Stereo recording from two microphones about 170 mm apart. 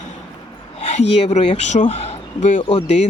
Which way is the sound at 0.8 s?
40° left (ahead or behind).